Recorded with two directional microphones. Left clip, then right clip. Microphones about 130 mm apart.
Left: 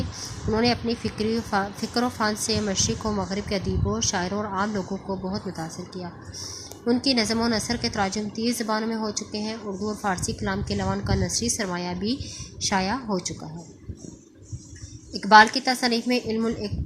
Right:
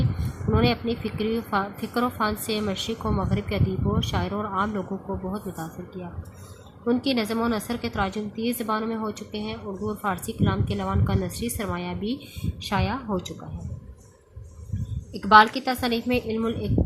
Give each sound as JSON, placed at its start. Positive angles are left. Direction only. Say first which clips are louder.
{"t": 0.5, "sound": "a woman's voice", "louder": "even", "side_deg": 30}
{"t": 6.8, "sound": "a woman's voice", "louder": "left 2 dB", "side_deg": 30}
{"t": 15.1, "sound": "a woman's voice", "louder": "left 1 dB", "side_deg": 30}